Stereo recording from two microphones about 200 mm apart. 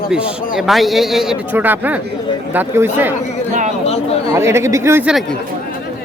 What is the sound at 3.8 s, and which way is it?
Chatter, 30° left (ahead or behind).